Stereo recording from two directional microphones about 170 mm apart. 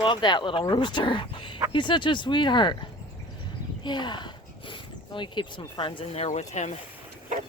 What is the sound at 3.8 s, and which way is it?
Speech, 25° left (ahead or behind).